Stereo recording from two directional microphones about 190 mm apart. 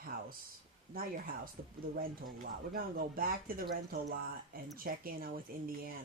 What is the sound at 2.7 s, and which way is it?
Speech, 50° right (ahead or behind).